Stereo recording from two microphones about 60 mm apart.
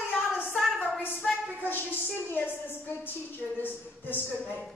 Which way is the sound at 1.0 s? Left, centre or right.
Left.